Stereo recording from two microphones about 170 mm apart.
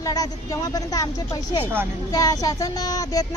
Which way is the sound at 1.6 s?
10° right (ahead or behind).